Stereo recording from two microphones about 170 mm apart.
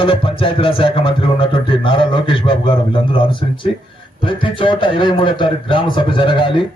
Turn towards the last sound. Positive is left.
turn(degrees=30)  # may be behind; listen again after turning